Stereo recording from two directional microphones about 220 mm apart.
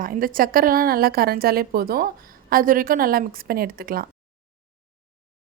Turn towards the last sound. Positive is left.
turn(degrees=-40)  # may be behind; listen again after turning